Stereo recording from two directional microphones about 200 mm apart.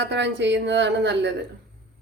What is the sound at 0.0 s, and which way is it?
A woman's voice, 60° right (ahead or behind).